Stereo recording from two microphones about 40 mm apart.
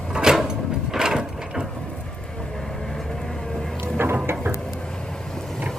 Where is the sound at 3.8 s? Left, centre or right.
Right.